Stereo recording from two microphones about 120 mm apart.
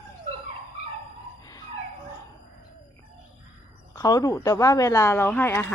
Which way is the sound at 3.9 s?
30° left (ahead or behind).